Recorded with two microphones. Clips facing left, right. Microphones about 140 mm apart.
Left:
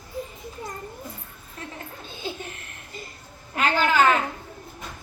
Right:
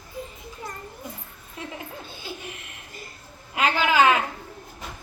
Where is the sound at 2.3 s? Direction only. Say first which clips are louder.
Left 5 dB; 20° left (ahead or behind).